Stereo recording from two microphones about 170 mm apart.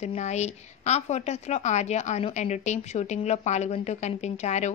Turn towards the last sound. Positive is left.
turn(degrees=40)  # may be behind; listen again after turning